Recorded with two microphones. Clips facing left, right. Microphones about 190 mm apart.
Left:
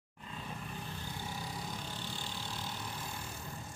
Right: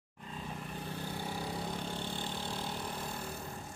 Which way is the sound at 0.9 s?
60° right (ahead or behind).